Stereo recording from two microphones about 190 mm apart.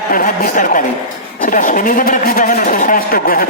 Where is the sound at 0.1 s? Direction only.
45° left (ahead or behind).